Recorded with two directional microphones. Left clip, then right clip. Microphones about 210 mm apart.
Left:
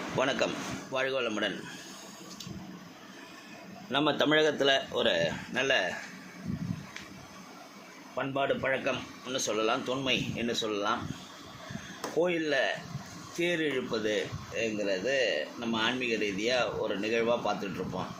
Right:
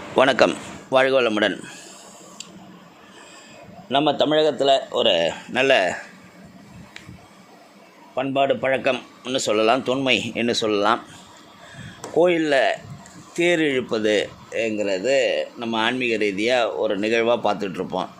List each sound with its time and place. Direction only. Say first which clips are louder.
0.2 s speech: right 13 dB; 50° right (ahead or behind)
3.9 s speech: right 8 dB; 20° right (ahead or behind)
5.1 s speech: right 9 dB; 40° right (ahead or behind)
8.1 s speech: right 10 dB; 40° right (ahead or behind)
12.2 s speech: right 11 dB; 50° right (ahead or behind)